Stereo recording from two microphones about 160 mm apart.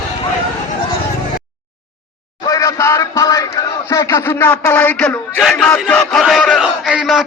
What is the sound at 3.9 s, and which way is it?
Speech, 20° left (ahead or behind).